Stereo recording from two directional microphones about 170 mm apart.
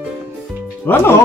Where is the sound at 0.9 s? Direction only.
15° left (ahead or behind).